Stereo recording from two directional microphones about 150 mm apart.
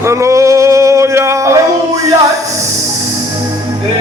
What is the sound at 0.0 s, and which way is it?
Music, 20° right (ahead or behind).